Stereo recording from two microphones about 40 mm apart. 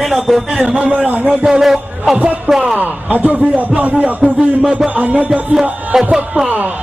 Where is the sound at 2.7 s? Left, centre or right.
Right.